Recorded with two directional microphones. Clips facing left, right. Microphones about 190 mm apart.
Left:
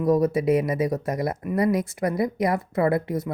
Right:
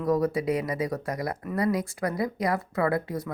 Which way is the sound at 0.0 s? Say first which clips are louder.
Left 4 dB; 20° left (ahead or behind).